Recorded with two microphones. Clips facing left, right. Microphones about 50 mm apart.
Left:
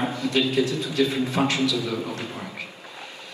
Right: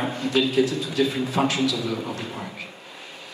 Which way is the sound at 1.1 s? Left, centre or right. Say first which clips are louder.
Even; left.